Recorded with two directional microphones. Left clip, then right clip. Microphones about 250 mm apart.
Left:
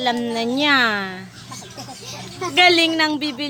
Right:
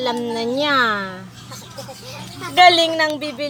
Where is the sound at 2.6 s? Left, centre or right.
Centre.